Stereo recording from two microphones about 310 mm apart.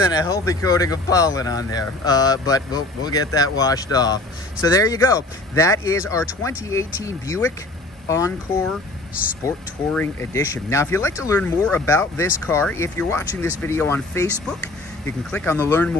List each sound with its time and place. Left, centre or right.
0.1 s speech: centre